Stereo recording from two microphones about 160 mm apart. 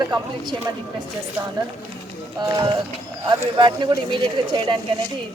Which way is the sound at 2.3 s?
25° right (ahead or behind).